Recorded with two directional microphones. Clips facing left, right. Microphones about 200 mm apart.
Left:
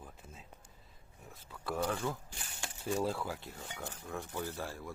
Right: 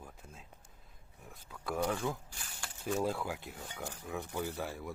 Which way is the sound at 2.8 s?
5° left (ahead or behind).